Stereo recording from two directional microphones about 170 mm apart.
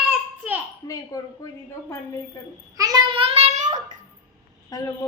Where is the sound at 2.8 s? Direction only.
25° right (ahead or behind); by 4.0 s 45° right (ahead or behind).